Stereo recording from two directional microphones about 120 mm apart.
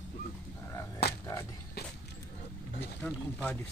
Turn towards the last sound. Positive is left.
turn(degrees=10)  # may be behind; listen again after turning